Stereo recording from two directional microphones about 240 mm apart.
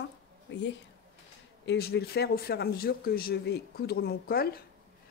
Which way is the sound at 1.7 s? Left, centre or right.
Left.